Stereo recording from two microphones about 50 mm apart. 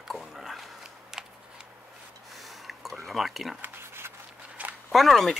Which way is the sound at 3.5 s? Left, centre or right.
Right.